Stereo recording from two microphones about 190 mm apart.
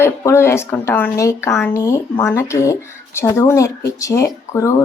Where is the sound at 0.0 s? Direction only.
15° left (ahead or behind).